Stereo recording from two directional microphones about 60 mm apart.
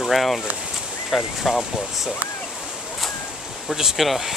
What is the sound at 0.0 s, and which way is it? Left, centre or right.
Speech, centre.